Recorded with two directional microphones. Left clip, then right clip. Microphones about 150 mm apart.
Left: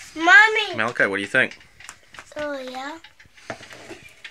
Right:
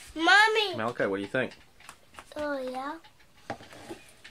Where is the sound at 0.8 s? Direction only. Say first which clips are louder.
Left 8 dB; 10° left (ahead or behind).